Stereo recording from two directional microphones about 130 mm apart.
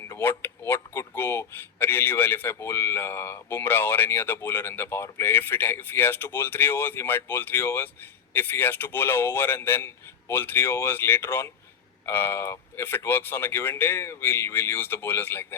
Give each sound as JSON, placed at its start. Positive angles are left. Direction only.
{"t": 0.1, "sound": "speech", "side_deg": 15}